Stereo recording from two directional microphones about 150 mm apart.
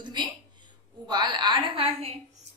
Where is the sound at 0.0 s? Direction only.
30° right (ahead or behind).